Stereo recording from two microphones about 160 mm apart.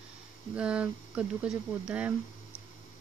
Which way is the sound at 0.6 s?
5° right (ahead or behind).